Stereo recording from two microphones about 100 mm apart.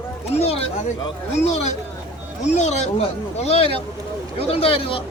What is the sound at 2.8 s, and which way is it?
Speech, 90° left.